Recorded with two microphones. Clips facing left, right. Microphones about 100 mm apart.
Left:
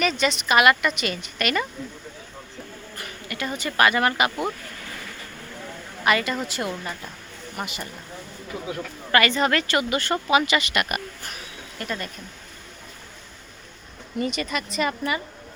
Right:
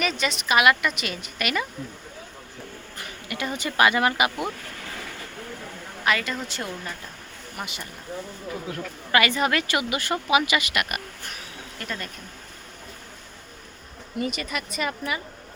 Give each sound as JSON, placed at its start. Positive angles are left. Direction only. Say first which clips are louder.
{"t": 0.0, "sound": "a woman's voice", "louder": "left 3 dB", "side_deg": 0}
{"t": 3.0, "sound": "speech", "louder": "even", "side_deg": -20}
{"t": 6.1, "sound": "a woman's voice", "louder": "left 3 dB", "side_deg": 5}
{"t": 9.1, "sound": "a woman's voice", "louder": "left 2 dB", "side_deg": -10}
{"t": 14.2, "sound": "a woman's voice", "louder": "left 2 dB", "side_deg": -5}